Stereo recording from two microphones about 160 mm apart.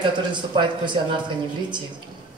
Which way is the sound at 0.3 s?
30° right (ahead or behind).